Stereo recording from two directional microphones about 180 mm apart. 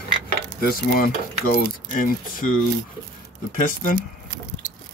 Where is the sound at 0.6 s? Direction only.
55° left (ahead or behind).